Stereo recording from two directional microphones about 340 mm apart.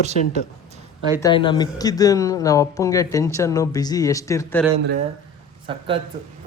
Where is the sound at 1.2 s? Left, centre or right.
Centre.